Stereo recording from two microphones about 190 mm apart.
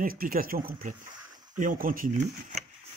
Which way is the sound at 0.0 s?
50° right (ahead or behind).